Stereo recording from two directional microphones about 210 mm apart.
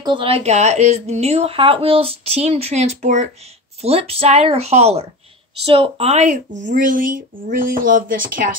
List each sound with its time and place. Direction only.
0.0 s speech: 25° right (ahead or behind); by 8.5 s 40° right (ahead or behind)